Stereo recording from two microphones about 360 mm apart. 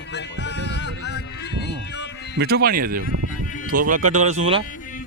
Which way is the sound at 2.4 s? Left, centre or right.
Right.